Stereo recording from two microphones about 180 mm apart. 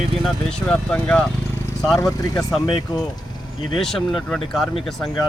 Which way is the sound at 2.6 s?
25° left (ahead or behind).